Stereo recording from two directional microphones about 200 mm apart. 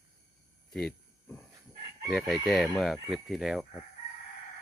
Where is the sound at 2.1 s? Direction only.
Centre (ahead or behind).